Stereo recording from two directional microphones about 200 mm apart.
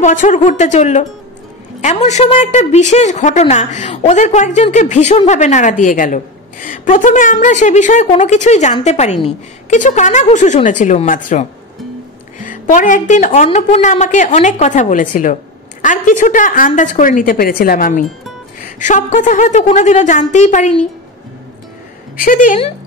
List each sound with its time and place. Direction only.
0.0 s a woman's voice: 40° left (ahead or behind)
22.1 s speech: 45° left (ahead or behind)